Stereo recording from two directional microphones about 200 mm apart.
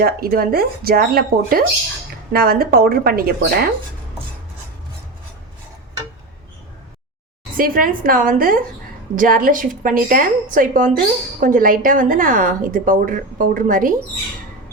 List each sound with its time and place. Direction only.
0.0 s a woman's voice: 50° right (ahead or behind)
7.5 s a woman's voice: 45° right (ahead or behind)